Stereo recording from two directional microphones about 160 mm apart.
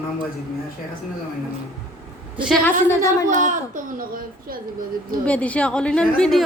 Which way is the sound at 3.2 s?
55° right (ahead or behind).